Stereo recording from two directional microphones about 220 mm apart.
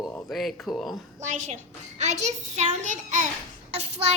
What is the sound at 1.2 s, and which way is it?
A child's voice, 35° right (ahead or behind).